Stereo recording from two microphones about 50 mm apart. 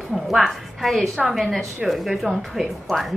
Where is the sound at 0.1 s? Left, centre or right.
Centre.